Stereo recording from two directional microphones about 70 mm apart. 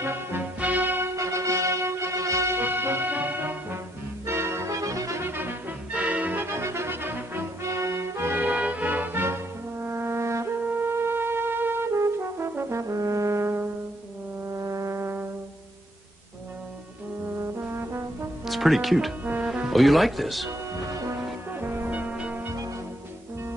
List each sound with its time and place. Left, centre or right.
0.0 s music: right
1.1 s music: right
2.6 s music: right
4.3 s music: right
5.2 s music: right
5.9 s music: centre
7.6 s music: right
14.5 s brass instrument: right
17.4 s brass instrument: right
18.4 s speech: centre
19.4 s music: centre
19.7 s speech: centre
21.5 s music: right